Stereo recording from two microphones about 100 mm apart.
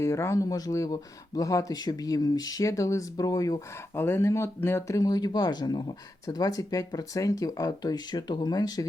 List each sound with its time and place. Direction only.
0.0 s speech: 30° left (ahead or behind)
3.9 s speech: 25° left (ahead or behind)
4.9 s speech: 40° left (ahead or behind)